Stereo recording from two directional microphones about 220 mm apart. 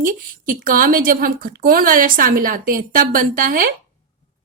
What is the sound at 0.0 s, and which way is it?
A woman's voice, 40° right (ahead or behind).